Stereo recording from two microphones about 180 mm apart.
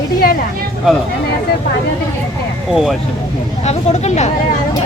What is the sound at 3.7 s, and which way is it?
Speech, 40° left (ahead or behind).